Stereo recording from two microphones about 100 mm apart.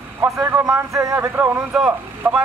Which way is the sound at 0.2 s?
15° right (ahead or behind).